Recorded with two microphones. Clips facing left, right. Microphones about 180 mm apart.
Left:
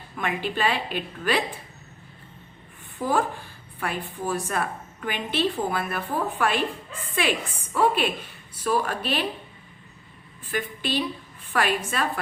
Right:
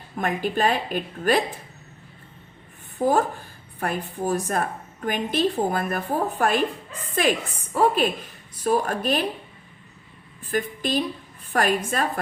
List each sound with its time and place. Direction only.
0.2 s a woman's voice: 45° right (ahead or behind)
3.0 s a woman's voice: 45° right (ahead or behind)
10.5 s a woman's voice: 40° right (ahead or behind)